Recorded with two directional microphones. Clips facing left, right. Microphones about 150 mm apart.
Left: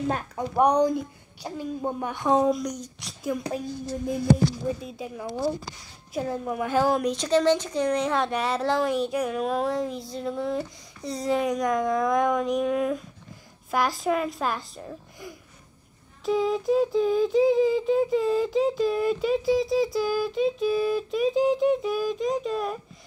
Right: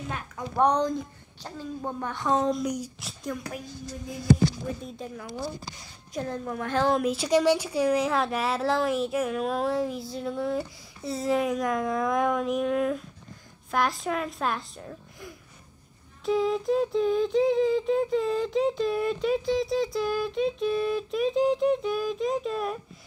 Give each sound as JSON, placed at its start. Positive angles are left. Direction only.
{"t": 0.6, "sound": "a woman's voice", "side_deg": 10}
{"t": 2.5, "sound": "a woman's voice", "side_deg": -10}
{"t": 3.4, "sound": "a woman's voice", "side_deg": 30}
{"t": 4.8, "sound": "a woman's voice", "side_deg": 10}